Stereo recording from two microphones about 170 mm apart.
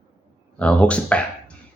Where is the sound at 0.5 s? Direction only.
5° left (ahead or behind).